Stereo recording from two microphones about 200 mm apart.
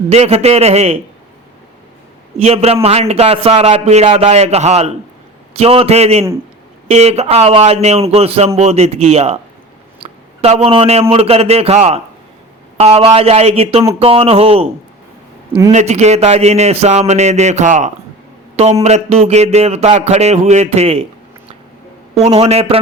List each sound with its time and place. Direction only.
0.1 s speech: 30° right (ahead or behind)
2.4 s speech: 30° right (ahead or behind)
10.0 s a sound: 30° right (ahead or behind)
11.1 s speech: 30° right (ahead or behind)
15.7 s speech: 35° right (ahead or behind)